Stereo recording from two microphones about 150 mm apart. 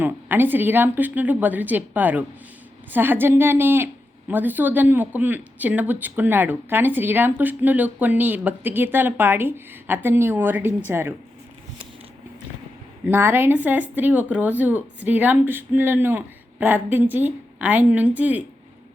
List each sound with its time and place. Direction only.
0.0 s speech: 15° right (ahead or behind)
13.1 s speech: 15° right (ahead or behind)